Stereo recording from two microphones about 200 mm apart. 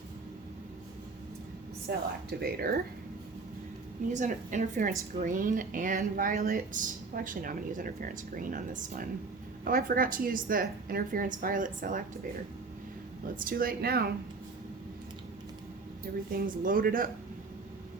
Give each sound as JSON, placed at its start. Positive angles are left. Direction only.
{"t": 1.9, "sound": "speech", "side_deg": -55}
{"t": 4.1, "sound": "a woman's voice", "side_deg": -40}
{"t": 13.2, "sound": "speech", "side_deg": -45}
{"t": 16.1, "sound": "speech", "side_deg": -50}